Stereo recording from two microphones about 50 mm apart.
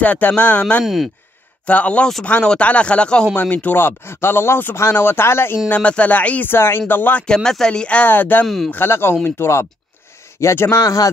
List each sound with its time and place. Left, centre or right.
0.0 s speech: left
0.6 s speech: left
0.8 s speech: centre
1.7 s speech: left
3.3 s speech: left
3.7 s speech: left
5.7 s speech: left
6.4 s speech: left
7.3 s speech: centre
8.0 s speech: left
8.8 s a man's voice: left